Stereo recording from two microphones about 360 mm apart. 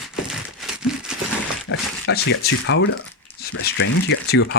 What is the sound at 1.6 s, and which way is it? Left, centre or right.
Speech, left.